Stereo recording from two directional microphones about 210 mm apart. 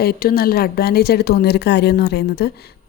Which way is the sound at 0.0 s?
45° left (ahead or behind).